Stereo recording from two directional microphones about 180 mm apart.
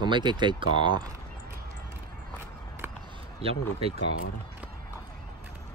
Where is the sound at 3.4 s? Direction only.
30° right (ahead or behind).